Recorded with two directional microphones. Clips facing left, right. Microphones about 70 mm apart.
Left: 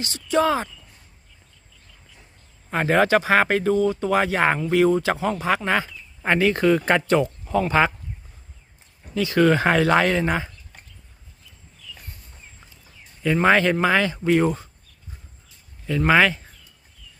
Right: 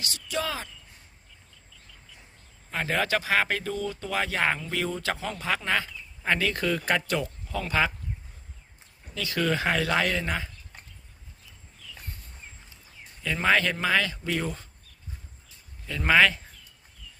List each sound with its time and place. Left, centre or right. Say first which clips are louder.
0.0 s speech: left 11 dB; left
2.6 s speech: left 9 dB; left
9.1 s speech: left 10 dB; left
9.4 s speech: left 8 dB; left
13.2 s speech: left 6 dB; left
15.9 s speech: left 4 dB; centre